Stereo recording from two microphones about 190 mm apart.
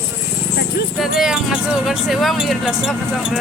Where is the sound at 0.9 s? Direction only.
Centre (ahead or behind).